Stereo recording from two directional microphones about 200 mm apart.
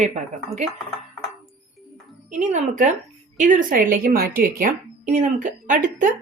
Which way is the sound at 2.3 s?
40° right (ahead or behind).